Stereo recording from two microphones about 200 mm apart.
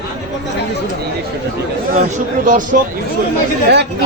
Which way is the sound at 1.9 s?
40° right (ahead or behind).